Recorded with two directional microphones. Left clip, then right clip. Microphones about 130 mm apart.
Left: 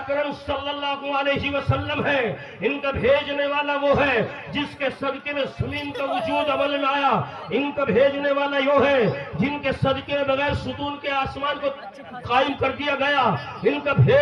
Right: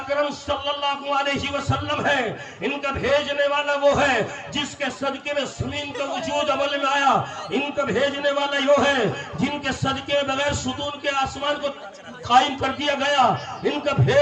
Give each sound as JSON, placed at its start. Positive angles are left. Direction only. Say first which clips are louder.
{"t": 0.2, "sound": "a man's voice", "louder": "right 2 dB", "side_deg": -40}